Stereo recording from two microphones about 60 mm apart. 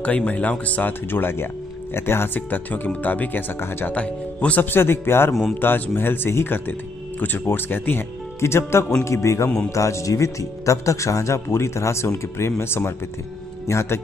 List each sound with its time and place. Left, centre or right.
0.0 s speech: left
3.9 s speech: left
4.6 s speech: left